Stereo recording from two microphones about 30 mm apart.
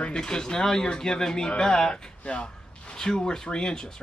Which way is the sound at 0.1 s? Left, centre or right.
Left.